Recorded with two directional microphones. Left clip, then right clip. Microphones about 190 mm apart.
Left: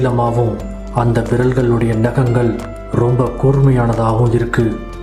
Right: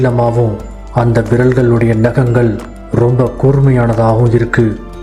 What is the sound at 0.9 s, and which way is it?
A man's voice, 20° right (ahead or behind).